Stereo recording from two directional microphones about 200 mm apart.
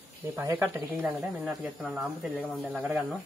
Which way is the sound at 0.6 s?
5° right (ahead or behind).